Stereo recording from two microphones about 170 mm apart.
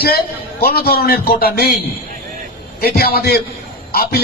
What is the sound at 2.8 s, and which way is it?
A man's voice, 65° left (ahead or behind).